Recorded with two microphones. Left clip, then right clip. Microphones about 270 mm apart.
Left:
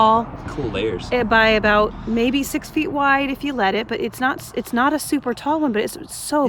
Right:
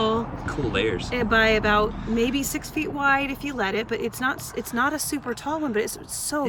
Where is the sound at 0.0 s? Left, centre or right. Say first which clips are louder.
Left 9 dB; left.